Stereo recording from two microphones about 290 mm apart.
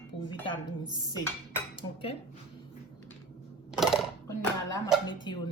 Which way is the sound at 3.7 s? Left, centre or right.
Centre.